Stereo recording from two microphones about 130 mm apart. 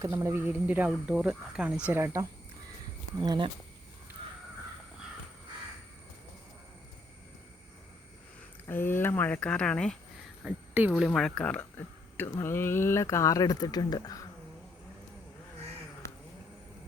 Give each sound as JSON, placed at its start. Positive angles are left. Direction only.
{"t": 0.0, "sound": "speech", "side_deg": -20}
{"t": 3.2, "sound": "speech", "side_deg": -35}
{"t": 8.6, "sound": "speech", "side_deg": 15}
{"t": 10.4, "sound": "speech", "side_deg": -15}
{"t": 11.0, "sound": "speech", "side_deg": 5}